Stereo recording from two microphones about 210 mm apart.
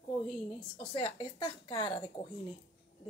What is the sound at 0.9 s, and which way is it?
A woman's voice, 25° left (ahead or behind).